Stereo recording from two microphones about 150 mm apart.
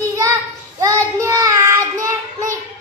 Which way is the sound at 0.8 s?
20° right (ahead or behind).